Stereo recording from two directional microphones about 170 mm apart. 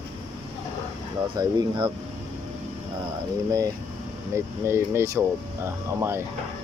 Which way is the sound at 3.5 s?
20° right (ahead or behind).